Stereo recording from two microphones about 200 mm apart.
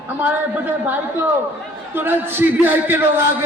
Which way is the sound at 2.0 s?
10° right (ahead or behind).